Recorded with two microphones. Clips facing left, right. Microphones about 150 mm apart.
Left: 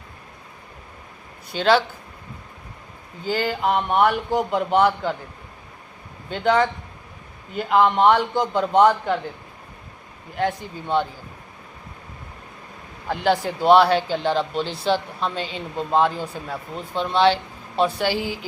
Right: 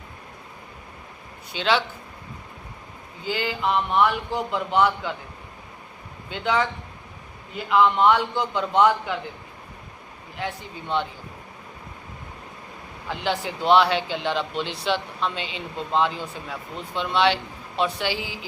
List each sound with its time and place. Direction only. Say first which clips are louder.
1.5 s speech: left 5 dB; 40° left (ahead or behind)
3.2 s a man's voice: left 3 dB; 45° left (ahead or behind)
6.3 s a man's voice: left 5 dB; 45° left (ahead or behind)
10.3 s a man's voice: left 7 dB; 45° left (ahead or behind)
13.1 s speech: left 6 dB; 45° left (ahead or behind)